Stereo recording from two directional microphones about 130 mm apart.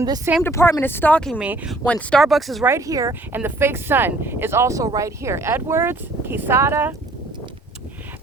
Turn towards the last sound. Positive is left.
turn(degrees=-20)  # may be behind; listen again after turning